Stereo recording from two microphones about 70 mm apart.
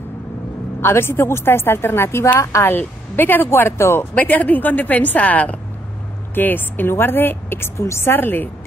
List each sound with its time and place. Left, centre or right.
0.7 s a woman's voice: left
4.1 s a woman's voice: left